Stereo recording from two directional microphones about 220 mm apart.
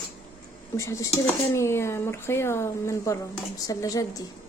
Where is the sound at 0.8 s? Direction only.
15° left (ahead or behind).